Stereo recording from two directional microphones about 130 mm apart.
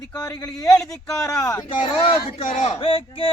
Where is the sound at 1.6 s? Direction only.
45° left (ahead or behind).